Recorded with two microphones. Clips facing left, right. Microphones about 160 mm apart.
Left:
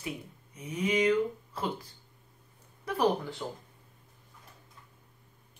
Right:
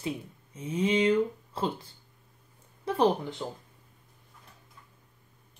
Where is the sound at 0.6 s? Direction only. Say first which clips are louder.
Right 3 dB; 25° right (ahead or behind).